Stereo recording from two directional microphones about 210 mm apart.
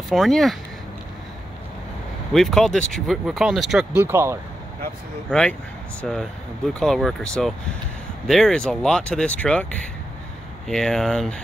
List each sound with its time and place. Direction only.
0.1 s speech: centre (ahead or behind)
2.3 s speech: centre (ahead or behind)
5.3 s speech: 5° left (ahead or behind)